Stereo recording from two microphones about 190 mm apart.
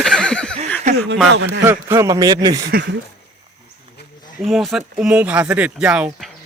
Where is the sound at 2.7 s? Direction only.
60° right (ahead or behind).